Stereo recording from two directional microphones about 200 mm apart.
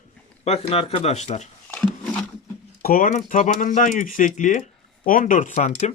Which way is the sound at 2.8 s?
45° left (ahead or behind).